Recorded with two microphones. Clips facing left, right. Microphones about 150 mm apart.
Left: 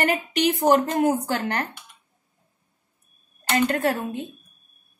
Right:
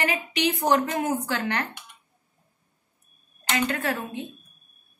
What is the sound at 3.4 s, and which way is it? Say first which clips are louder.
Speech: left 5 dB; 40° left (ahead or behind).